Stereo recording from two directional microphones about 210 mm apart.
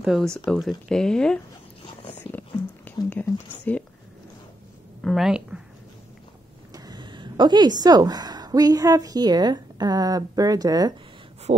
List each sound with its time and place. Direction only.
0.0 s speech: centre (ahead or behind)
3.1 s speech: 5° left (ahead or behind)
5.0 s a woman's voice: centre (ahead or behind)
6.7 s speech: 20° right (ahead or behind)